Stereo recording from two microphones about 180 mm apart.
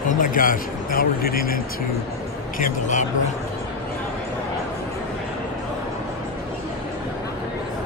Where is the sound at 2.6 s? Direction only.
45° left (ahead or behind).